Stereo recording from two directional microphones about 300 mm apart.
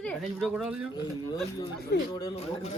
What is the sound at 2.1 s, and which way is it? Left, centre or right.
Speech, centre.